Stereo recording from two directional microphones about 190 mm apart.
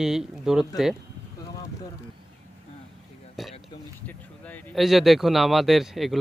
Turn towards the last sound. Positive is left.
turn(degrees=0)  # may be behind; listen again after turning